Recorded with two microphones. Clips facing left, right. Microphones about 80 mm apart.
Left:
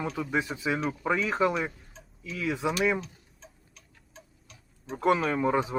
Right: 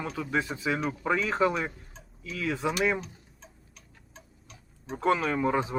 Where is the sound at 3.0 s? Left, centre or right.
Centre.